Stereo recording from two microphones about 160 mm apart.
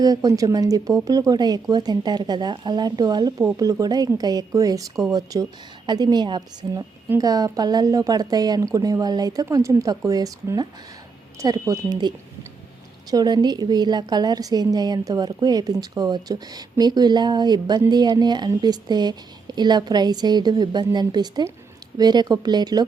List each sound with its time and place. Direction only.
0.0 s a woman's voice: 20° right (ahead or behind)